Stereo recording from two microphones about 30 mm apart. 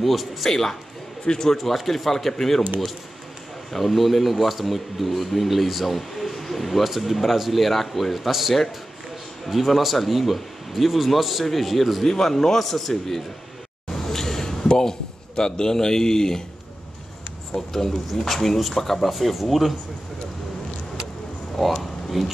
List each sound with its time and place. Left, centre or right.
0.0 s speech: centre
0.5 s a man's voice: centre
1.2 s a man's voice: left
1.6 s a man's voice: centre
3.7 s speech: centre
9.8 s speech: centre
12.1 s a man's voice: centre
13.9 s a sound: centre
14.7 s a man's voice: left
17.6 s a man's voice: centre
21.5 s speech: centre